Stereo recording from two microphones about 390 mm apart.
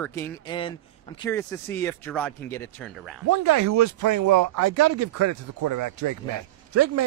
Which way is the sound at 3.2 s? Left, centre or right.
Right.